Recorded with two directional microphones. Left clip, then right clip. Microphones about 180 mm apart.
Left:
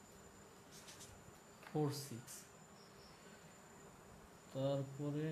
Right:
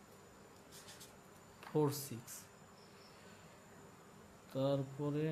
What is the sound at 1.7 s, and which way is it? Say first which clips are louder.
Speech: right 5 dB; 35° right (ahead or behind).